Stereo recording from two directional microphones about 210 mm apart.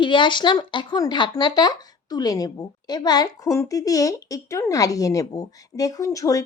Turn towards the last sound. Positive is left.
turn(degrees=15)  # may be behind; listen again after turning